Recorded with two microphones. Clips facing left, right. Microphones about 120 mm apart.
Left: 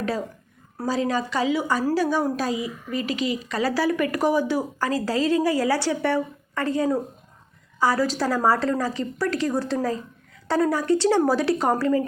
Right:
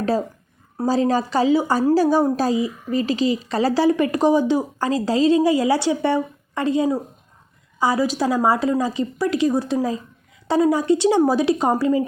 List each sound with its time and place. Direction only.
0.9 s a woman's voice: 35° right (ahead or behind); by 12.0 s 15° right (ahead or behind)